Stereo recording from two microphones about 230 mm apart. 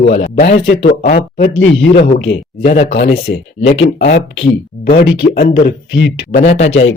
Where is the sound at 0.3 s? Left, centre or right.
Left.